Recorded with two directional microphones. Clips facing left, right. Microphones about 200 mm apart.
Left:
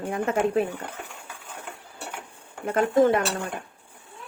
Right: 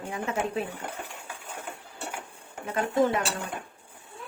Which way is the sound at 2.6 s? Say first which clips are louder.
Left 5 dB; 50° left (ahead or behind).